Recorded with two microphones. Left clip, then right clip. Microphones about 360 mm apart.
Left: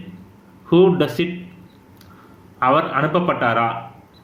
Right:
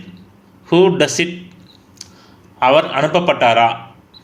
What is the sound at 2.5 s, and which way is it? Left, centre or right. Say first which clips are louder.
A man's voice: right 4 dB; centre.